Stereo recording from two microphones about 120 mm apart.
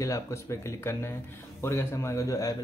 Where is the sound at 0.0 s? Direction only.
25° left (ahead or behind).